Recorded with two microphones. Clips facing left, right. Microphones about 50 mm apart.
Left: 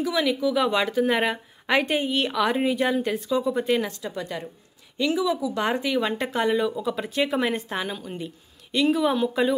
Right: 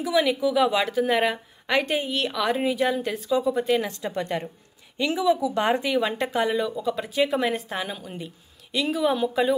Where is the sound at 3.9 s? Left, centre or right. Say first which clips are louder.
Right 3 dB; right.